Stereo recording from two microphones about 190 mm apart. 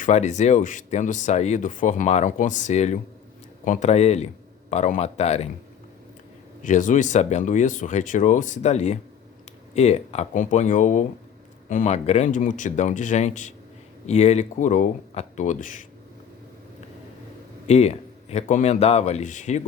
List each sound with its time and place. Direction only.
0.0 s speech: 40° left (ahead or behind)
6.6 s speech: 40° left (ahead or behind)
17.7 s speech: 35° left (ahead or behind)